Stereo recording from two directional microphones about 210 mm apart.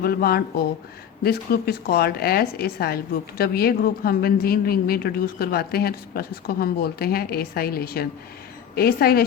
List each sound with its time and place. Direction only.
0.0 s a woman's voice: 45° left (ahead or behind)